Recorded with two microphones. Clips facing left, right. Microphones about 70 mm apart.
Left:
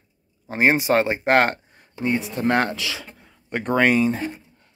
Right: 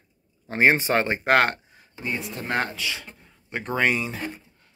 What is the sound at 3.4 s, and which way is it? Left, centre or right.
Speech, left.